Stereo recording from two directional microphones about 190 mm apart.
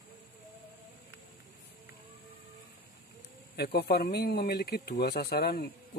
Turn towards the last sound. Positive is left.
turn(degrees=55)  # may be behind; listen again after turning